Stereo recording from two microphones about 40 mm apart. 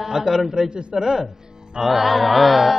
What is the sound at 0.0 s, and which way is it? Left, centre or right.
Speech, centre.